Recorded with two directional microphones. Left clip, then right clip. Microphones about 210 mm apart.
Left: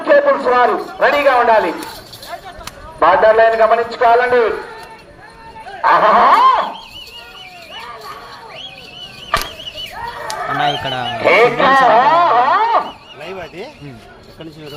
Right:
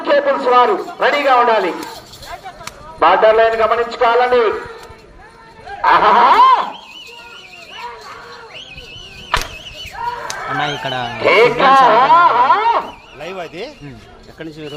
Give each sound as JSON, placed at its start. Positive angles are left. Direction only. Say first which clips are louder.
{"t": 0.0, "sound": "a man's voice", "louder": "left 2 dB", "side_deg": -25}
{"t": 3.0, "sound": "a man's voice", "louder": "left 1 dB", "side_deg": -20}
{"t": 5.8, "sound": "a sound", "louder": "even", "side_deg": -20}
{"t": 10.6, "sound": "speech", "louder": "left 2 dB", "side_deg": 0}
{"t": 11.2, "sound": "music", "louder": "even", "side_deg": -20}
{"t": 13.2, "sound": "a sound", "louder": "right 2 dB", "side_deg": -55}